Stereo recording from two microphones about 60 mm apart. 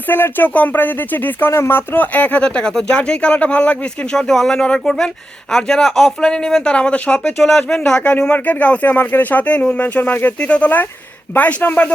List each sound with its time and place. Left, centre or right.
0.1 s speech: left
7.3 s speech: centre
8.4 s speech: left